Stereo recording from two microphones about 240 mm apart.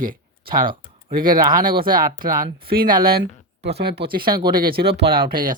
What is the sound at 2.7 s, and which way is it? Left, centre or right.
Speech, right.